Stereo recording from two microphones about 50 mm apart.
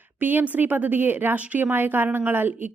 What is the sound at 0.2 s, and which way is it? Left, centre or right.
A woman's voice, right.